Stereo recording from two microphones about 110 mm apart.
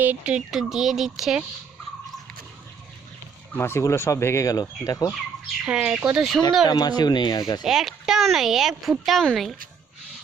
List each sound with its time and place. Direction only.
0.0 s a woman's voice: 15° right (ahead or behind)
3.5 s speech: 20° left (ahead or behind)
5.6 s a woman's voice: 10° right (ahead or behind)
6.7 s speech: 40° left (ahead or behind)
7.6 s a woman's voice: 5° right (ahead or behind)